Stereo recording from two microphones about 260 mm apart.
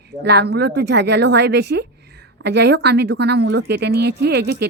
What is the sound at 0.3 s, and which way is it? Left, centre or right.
Speech, right.